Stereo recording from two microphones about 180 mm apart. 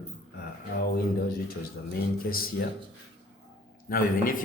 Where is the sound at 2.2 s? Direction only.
55° left (ahead or behind).